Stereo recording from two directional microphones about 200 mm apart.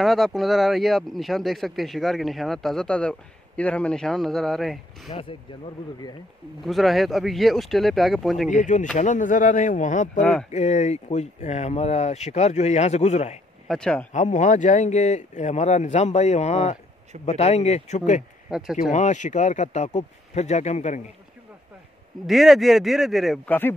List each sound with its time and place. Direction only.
0.0 s speech: centre (ahead or behind)
6.6 s speech: centre (ahead or behind)
8.5 s speech: 40° left (ahead or behind)
13.7 s speech: 5° left (ahead or behind)
14.1 s speech: 40° left (ahead or behind)
22.2 s speech: centre (ahead or behind)